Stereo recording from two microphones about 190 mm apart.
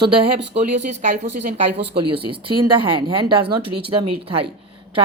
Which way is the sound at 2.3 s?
25° right (ahead or behind).